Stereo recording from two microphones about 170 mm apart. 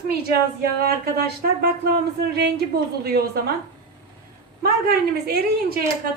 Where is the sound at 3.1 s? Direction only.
65° right (ahead or behind).